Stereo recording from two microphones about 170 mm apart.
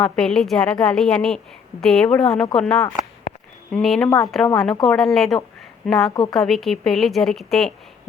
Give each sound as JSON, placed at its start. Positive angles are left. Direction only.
{"t": 0.0, "sound": "a woman's voice", "side_deg": 5}
{"t": 6.1, "sound": "a woman's voice", "side_deg": 25}
{"t": 6.3, "sound": "a woman's voice", "side_deg": 0}